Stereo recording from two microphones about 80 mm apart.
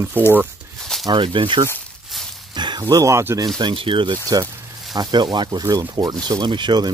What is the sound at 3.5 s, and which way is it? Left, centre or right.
Speech, right.